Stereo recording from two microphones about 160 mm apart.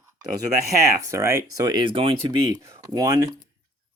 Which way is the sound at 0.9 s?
20° right (ahead or behind).